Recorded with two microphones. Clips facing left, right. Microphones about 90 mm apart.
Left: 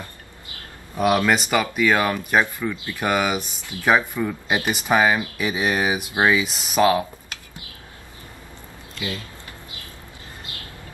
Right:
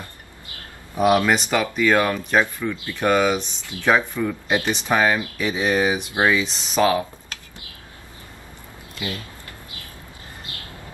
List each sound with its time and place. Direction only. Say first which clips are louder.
1.2 s speech: even; 5° left (ahead or behind)
2.7 s speech: right 1 dB; 20° left (ahead or behind)
3.0 s speech: right 3 dB; 10° left (ahead or behind)